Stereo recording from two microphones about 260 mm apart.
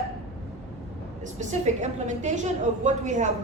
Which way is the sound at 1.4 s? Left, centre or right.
Right.